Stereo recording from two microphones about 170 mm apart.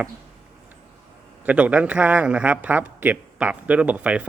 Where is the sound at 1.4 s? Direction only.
5° right (ahead or behind).